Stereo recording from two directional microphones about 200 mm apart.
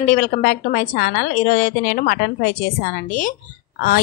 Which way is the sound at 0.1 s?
45° left (ahead or behind).